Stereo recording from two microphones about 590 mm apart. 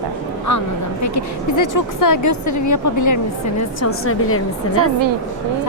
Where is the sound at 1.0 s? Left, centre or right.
Left.